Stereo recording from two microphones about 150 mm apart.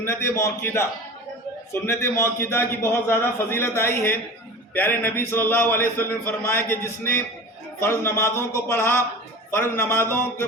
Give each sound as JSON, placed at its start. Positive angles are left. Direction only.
{"t": 0.0, "sound": "a man's voice", "side_deg": 15}
{"t": 1.9, "sound": "a man's voice", "side_deg": 15}